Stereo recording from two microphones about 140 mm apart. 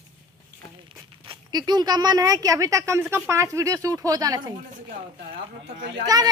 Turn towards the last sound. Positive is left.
turn(degrees=-30)  # may be behind; listen again after turning